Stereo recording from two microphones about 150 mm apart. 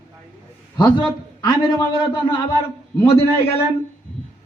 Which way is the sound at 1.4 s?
25° left (ahead or behind).